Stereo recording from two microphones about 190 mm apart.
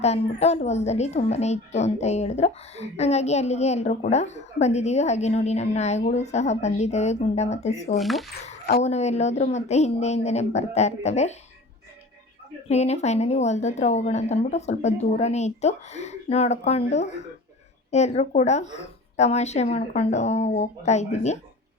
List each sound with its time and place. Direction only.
0.0 s a woman's voice: 35° left (ahead or behind)
7.9 s speech: centre (ahead or behind)
8.8 s a woman's voice: 35° left (ahead or behind)
12.6 s a woman's voice: 35° left (ahead or behind)